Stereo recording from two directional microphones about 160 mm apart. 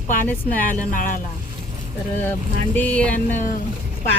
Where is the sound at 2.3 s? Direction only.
10° left (ahead or behind).